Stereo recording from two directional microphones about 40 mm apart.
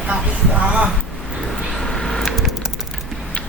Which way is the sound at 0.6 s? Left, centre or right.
Right.